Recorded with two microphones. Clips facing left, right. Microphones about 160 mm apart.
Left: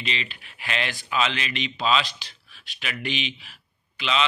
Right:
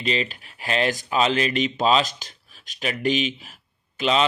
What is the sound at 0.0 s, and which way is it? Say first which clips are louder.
Speech: right 7 dB; 40° right (ahead or behind).